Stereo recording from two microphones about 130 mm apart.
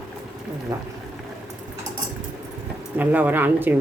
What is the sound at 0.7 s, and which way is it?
Speech, 25° right (ahead or behind).